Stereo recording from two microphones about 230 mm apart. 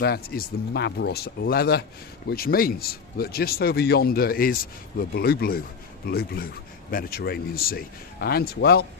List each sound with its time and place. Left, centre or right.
0.0 s speech: left